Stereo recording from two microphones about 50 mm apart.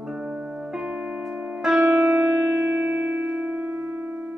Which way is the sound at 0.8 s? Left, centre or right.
Right.